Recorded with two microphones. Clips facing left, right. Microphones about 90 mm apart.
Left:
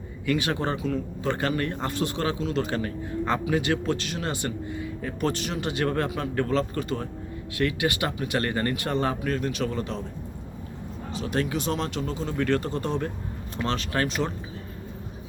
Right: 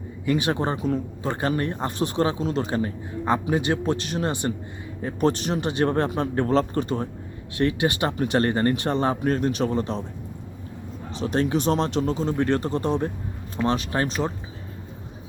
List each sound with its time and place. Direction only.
0.3 s speech: 25° right (ahead or behind)
11.2 s speech: 30° right (ahead or behind)